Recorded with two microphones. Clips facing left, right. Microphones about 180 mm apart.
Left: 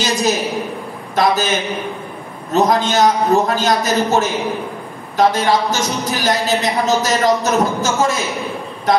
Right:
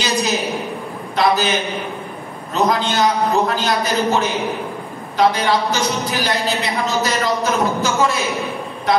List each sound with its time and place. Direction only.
0.0 s a woman's voice: 45° left (ahead or behind)
2.5 s a woman's voice: 45° left (ahead or behind)